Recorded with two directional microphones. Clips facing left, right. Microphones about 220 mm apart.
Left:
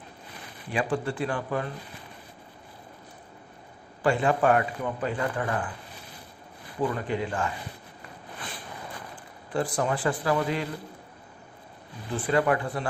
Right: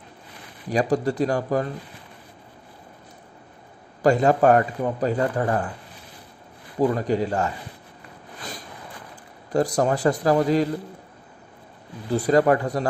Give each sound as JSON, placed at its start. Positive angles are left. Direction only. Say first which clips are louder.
{"t": 0.7, "sound": "a man's voice", "louder": "right 6 dB", "side_deg": -40}
{"t": 4.0, "sound": "a man's voice", "louder": "right 6 dB", "side_deg": -40}
{"t": 6.8, "sound": "a man's voice", "louder": "right 7 dB", "side_deg": -40}
{"t": 9.5, "sound": "a man's voice", "louder": "right 6 dB", "side_deg": -40}
{"t": 12.1, "sound": "a man's voice", "louder": "right 6 dB", "side_deg": -40}